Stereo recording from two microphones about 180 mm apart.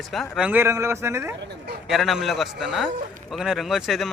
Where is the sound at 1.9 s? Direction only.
Centre (ahead or behind).